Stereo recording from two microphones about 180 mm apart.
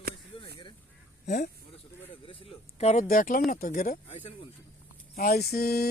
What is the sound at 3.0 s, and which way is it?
Speech, 50° left (ahead or behind).